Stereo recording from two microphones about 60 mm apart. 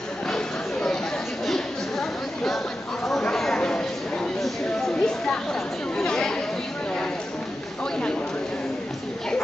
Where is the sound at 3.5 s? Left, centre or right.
Centre.